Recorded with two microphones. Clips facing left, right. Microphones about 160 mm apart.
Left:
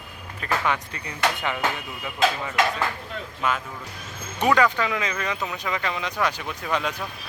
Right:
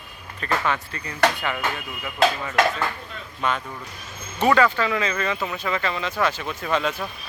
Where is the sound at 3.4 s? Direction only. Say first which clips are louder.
Right 1 dB; 5° left (ahead or behind).